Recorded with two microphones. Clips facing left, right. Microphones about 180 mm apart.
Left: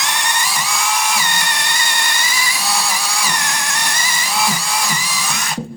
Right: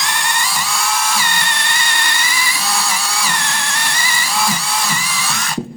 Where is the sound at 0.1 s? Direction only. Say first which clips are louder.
Even; 20° left (ahead or behind).